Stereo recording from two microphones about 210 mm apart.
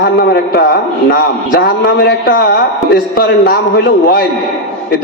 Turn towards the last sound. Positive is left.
turn(degrees=50)  # may be behind; listen again after turning